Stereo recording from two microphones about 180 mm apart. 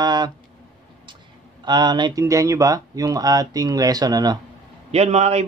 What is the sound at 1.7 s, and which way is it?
Speech, 25° right (ahead or behind).